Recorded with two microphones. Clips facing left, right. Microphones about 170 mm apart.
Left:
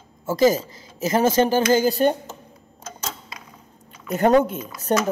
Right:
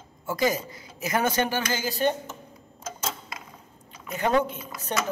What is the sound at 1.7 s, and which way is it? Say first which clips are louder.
Speech: left 8 dB; 45° left (ahead or behind).